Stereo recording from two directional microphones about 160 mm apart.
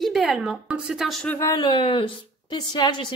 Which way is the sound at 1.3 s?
20° left (ahead or behind).